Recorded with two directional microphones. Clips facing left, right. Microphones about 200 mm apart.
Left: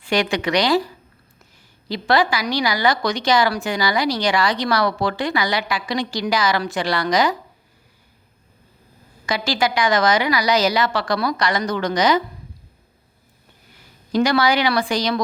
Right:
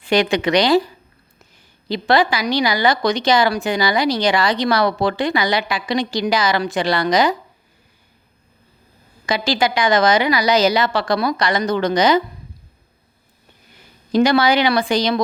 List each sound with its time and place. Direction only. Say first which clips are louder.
0.0 s a woman's voice: right 4 dB; 20° right (ahead or behind)
1.9 s a woman's voice: right 2 dB; 20° right (ahead or behind)
9.2 s a woman's voice: right 2 dB; 20° right (ahead or behind)
13.7 s a woman's voice: right 3 dB; 20° right (ahead or behind)